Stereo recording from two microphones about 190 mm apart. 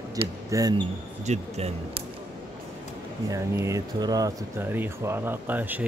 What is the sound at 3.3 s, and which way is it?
Speech, 20° right (ahead or behind).